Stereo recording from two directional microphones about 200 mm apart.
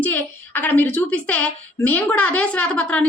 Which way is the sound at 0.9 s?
5° left (ahead or behind).